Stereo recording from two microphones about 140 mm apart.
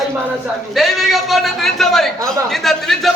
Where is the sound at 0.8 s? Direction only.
Centre (ahead or behind).